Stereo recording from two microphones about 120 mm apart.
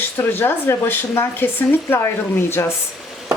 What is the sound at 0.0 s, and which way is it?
Speech, 20° left (ahead or behind).